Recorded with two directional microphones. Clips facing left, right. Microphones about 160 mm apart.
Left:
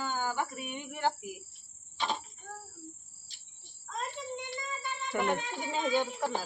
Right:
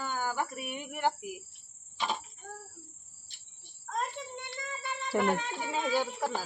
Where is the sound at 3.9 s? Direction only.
60° right (ahead or behind).